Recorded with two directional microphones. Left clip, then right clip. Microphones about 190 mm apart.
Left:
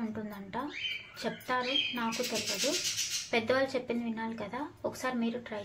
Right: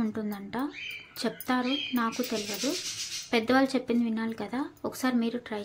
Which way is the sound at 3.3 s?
40° right (ahead or behind).